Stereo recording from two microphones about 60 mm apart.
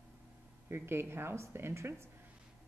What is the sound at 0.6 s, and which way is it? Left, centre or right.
Speech, right.